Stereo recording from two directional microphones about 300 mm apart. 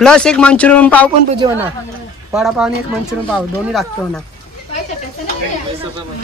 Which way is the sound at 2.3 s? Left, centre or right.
Centre.